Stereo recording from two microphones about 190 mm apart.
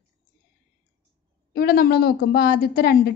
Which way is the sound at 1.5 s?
55° left (ahead or behind).